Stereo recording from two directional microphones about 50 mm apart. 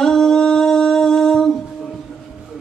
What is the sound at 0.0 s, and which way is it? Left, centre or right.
Humming, centre.